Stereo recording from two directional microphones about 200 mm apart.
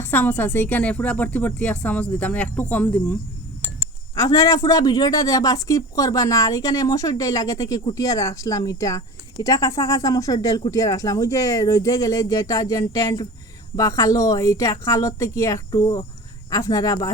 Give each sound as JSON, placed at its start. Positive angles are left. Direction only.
{"t": 0.0, "sound": "speech", "side_deg": 10}